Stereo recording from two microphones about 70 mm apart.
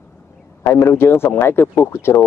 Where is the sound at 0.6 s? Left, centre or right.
Left.